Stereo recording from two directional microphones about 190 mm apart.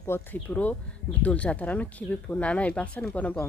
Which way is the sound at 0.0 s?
10° left (ahead or behind).